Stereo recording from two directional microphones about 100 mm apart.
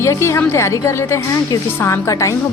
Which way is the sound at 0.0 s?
30° left (ahead or behind).